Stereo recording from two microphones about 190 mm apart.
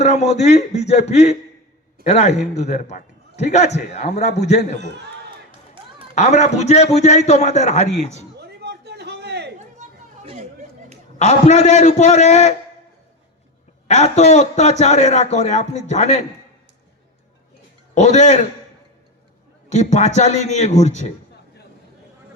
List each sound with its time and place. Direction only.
0.0 s a man's voice: 35° left (ahead or behind)
6.1 s a man's voice: 35° left (ahead or behind)
8.4 s a sound: 60° right (ahead or behind)
11.2 s a man's voice: 35° left (ahead or behind)
13.8 s a man's voice: 35° left (ahead or behind)
17.9 s a man's voice: 40° left (ahead or behind)
19.7 s a man's voice: 40° left (ahead or behind)